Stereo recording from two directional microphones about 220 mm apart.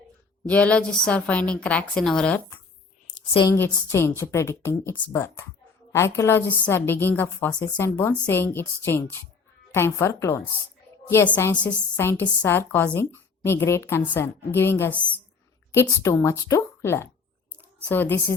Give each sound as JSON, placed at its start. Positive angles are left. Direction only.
{"t": 0.4, "sound": "a woman's voice", "side_deg": 5}
{"t": 3.2, "sound": "a woman's voice", "side_deg": 25}
{"t": 3.5, "sound": "a woman's voice", "side_deg": 10}